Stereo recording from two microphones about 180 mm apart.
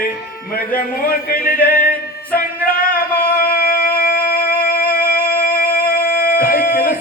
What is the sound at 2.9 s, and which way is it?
Singing, 55° left (ahead or behind).